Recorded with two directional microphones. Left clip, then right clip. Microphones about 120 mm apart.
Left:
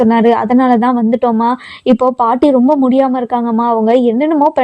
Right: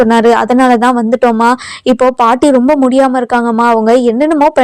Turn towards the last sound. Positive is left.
turn(degrees=0)  # may be behind; listen again after turning